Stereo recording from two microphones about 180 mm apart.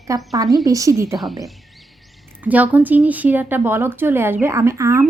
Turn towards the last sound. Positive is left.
turn(degrees=-15)  # may be behind; listen again after turning